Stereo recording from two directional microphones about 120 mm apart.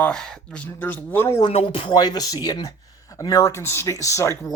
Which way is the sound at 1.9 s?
35° left (ahead or behind).